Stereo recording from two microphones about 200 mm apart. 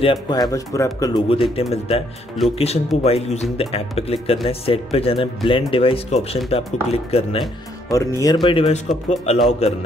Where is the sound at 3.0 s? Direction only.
30° left (ahead or behind).